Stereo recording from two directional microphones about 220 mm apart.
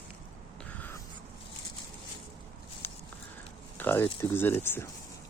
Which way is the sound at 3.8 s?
10° left (ahead or behind).